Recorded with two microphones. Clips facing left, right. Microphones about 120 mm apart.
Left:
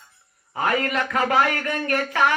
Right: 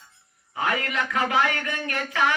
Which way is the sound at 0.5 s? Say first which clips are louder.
Left 4 dB; 45° left (ahead or behind).